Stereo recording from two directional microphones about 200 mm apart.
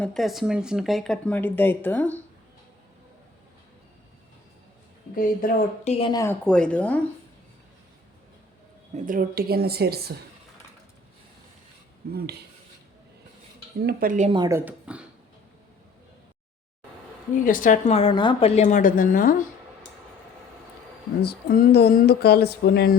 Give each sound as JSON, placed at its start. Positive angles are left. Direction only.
{"t": 0.0, "sound": "speech", "side_deg": 0}
{"t": 5.1, "sound": "a woman's voice", "side_deg": 45}
{"t": 6.1, "sound": "a woman's voice", "side_deg": 15}
{"t": 6.4, "sound": "speech", "side_deg": 5}
{"t": 9.0, "sound": "a woman's voice", "side_deg": -45}
{"t": 12.1, "sound": "a woman's voice", "side_deg": -50}
{"t": 13.8, "sound": "a woman's voice", "side_deg": -45}
{"t": 14.3, "sound": "speech", "side_deg": -20}
{"t": 14.6, "sound": "speech", "side_deg": -5}
{"t": 17.3, "sound": "a woman's voice", "side_deg": 45}
{"t": 21.2, "sound": "speech", "side_deg": 50}